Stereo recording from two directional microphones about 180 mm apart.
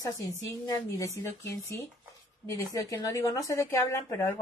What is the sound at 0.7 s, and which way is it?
A woman's voice, 15° left (ahead or behind).